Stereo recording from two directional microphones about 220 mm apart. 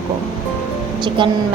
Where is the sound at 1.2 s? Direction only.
20° right (ahead or behind).